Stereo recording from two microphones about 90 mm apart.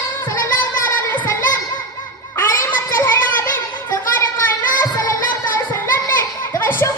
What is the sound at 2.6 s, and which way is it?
Child singing, 30° left (ahead or behind).